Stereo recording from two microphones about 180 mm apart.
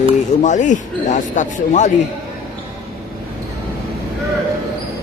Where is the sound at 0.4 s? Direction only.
45° left (ahead or behind).